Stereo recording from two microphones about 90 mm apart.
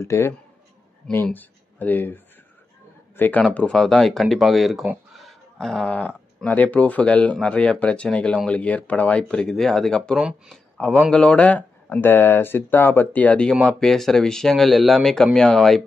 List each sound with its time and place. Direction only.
0.0 s speech: 30° left (ahead or behind); by 4.8 s centre (ahead or behind)
5.1 s a sound: centre (ahead or behind)
5.9 s speech: 15° left (ahead or behind)
10.1 s speech: 5° right (ahead or behind)
10.5 s speech: 5° left (ahead or behind)